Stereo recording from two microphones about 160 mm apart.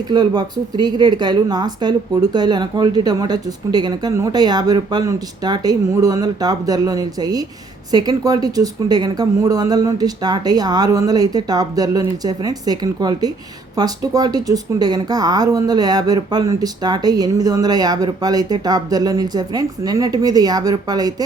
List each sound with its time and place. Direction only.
0.1 s speech: 25° right (ahead or behind)